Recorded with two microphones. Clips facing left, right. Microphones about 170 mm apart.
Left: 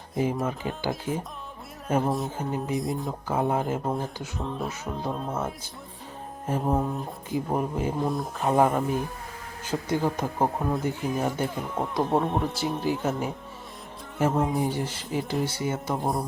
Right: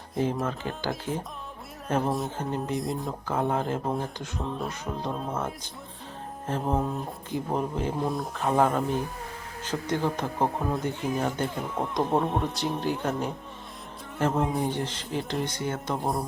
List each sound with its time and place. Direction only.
0.1 s speech: centre (ahead or behind)